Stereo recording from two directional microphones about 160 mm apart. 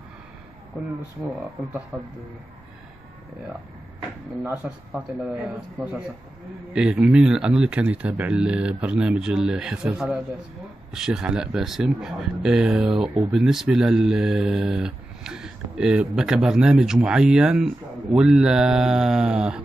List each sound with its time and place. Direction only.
4.6 s speech: 5° right (ahead or behind)